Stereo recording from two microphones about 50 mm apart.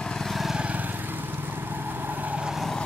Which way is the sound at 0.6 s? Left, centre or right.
Right.